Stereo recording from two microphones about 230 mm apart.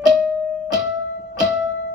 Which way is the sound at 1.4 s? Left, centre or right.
Centre.